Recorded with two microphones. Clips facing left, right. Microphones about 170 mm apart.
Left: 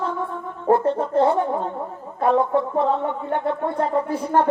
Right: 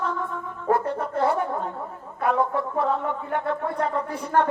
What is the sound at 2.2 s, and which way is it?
A woman's voice, 25° left (ahead or behind).